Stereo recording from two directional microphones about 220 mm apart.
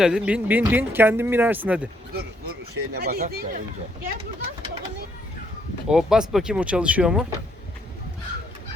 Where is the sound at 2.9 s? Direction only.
45° right (ahead or behind).